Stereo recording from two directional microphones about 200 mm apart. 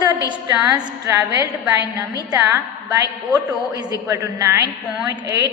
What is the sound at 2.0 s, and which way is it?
A woman's voice, 15° right (ahead or behind).